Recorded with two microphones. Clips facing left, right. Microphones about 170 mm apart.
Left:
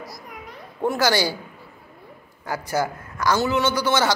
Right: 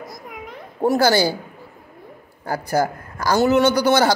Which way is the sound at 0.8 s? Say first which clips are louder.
Right 4 dB; 35° right (ahead or behind).